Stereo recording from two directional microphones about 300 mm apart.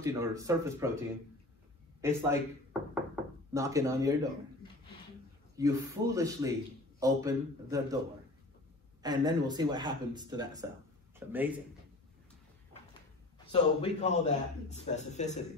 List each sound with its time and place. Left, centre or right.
0.0 s speech: centre
2.0 s speech: centre
3.5 s speech: centre
5.6 s speech: centre
9.0 s speech: centre
13.5 s a man's voice: left